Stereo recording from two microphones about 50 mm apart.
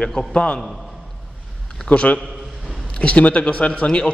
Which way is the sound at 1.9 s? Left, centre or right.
Left.